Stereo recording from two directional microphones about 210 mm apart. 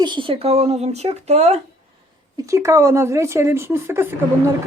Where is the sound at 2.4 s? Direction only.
15° right (ahead or behind).